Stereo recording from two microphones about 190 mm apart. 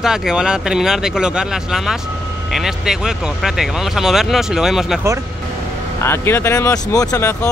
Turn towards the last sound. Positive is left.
turn(degrees=15)  # may be behind; listen again after turning